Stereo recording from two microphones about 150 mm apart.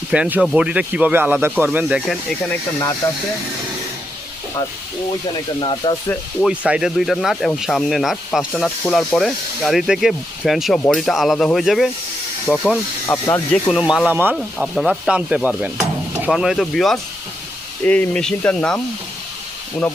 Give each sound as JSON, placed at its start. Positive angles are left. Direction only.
{"t": 0.1, "sound": "speech", "side_deg": -10}
{"t": 5.5, "sound": "speech", "side_deg": 30}
{"t": 6.4, "sound": "speech", "side_deg": -10}
{"t": 13.1, "sound": "speech", "side_deg": 15}
{"t": 13.7, "sound": "speech", "side_deg": -5}